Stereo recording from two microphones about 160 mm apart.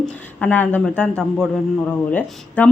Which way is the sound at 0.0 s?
10° left (ahead or behind).